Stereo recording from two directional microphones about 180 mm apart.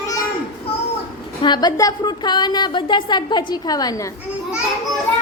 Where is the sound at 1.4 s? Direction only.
25° left (ahead or behind).